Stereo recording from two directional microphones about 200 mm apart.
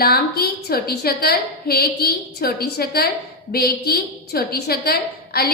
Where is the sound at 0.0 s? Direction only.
50° left (ahead or behind).